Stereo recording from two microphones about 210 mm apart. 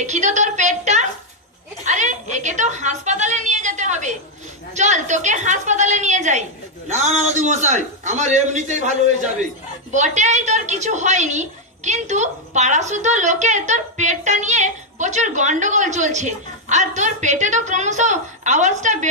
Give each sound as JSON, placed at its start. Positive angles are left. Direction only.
{"t": 0.0, "sound": "a woman's voice", "side_deg": -35}
{"t": 9.9, "sound": "a woman's voice", "side_deg": -35}